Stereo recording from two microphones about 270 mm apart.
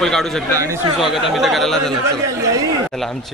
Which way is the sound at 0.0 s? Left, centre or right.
Centre.